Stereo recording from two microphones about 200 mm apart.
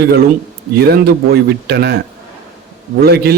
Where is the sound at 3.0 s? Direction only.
55° right (ahead or behind).